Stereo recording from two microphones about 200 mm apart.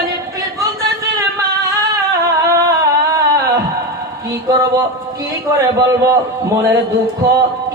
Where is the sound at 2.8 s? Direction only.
15° right (ahead or behind).